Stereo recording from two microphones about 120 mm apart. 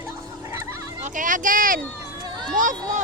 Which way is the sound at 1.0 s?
90° right.